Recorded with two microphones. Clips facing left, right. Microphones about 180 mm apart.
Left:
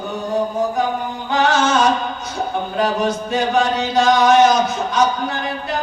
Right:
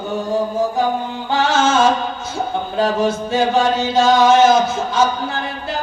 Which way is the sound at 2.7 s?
25° right (ahead or behind).